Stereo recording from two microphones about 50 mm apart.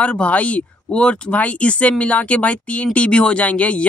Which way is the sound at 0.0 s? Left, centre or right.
Left.